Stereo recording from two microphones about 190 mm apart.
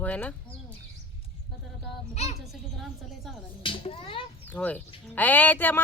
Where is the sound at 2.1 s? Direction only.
35° left (ahead or behind).